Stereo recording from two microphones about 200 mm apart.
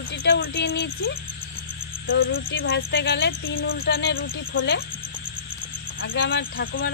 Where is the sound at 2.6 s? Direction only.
50° left (ahead or behind).